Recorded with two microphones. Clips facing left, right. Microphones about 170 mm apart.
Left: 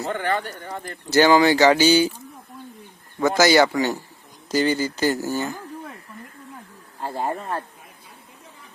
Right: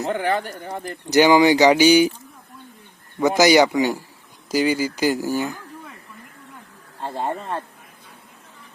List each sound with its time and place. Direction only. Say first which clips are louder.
0.0 s speech: right 2 dB; 15° right (ahead or behind)
3.2 s speech: right 2 dB; 15° right (ahead or behind)
7.0 s speech: even; 5° left (ahead or behind)